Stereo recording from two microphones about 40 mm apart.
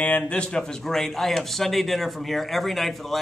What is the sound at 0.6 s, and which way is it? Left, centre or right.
A man's voice, centre.